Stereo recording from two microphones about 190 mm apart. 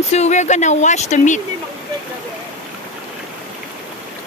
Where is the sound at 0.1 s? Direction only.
35° left (ahead or behind).